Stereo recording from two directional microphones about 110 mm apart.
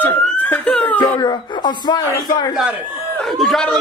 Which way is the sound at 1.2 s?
40° left (ahead or behind).